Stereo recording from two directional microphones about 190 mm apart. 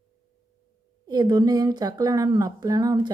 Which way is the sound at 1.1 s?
20° right (ahead or behind).